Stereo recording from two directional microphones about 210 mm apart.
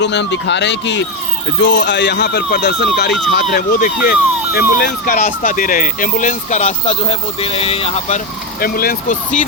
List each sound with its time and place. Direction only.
0.0 s speech: 55° left (ahead or behind); by 8.2 s 30° left (ahead or behind)
8.6 s speech: 45° left (ahead or behind)